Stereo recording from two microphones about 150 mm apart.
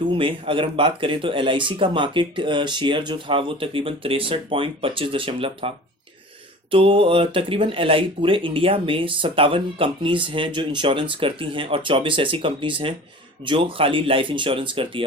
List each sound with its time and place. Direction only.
0.1 s speech: 35° right (ahead or behind)